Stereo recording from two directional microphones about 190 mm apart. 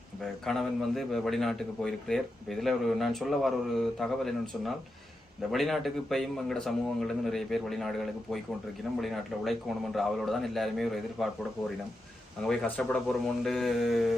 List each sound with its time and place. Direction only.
0.4 s a man's voice: centre (ahead or behind)
12.5 s a man's voice: 5° left (ahead or behind)